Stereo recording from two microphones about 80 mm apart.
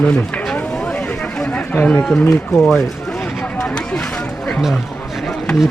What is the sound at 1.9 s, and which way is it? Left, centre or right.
Speech, centre.